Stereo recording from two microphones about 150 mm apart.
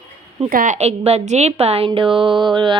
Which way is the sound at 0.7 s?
45° right (ahead or behind).